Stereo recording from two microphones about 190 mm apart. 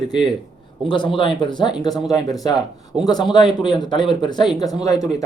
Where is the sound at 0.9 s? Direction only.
25° left (ahead or behind).